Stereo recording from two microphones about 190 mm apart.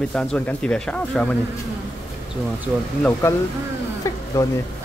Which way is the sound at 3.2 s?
10° left (ahead or behind).